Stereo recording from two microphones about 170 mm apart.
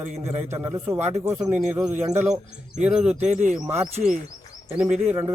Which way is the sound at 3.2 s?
45° right (ahead or behind).